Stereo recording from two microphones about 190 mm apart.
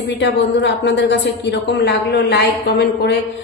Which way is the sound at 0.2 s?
70° left (ahead or behind).